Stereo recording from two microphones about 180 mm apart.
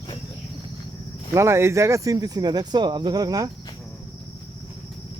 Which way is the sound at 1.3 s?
15° right (ahead or behind).